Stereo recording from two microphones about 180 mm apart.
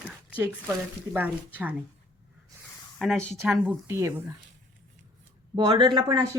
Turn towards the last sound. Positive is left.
turn(degrees=-25)  # may be behind; listen again after turning